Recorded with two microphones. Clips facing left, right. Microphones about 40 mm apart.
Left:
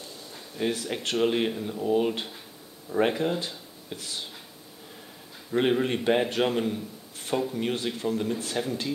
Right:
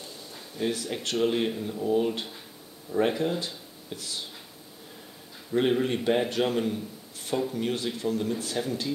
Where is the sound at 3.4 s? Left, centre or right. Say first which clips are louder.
Even; left.